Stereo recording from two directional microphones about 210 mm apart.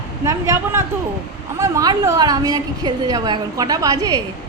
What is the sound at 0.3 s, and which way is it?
A woman's voice, 15° right (ahead or behind).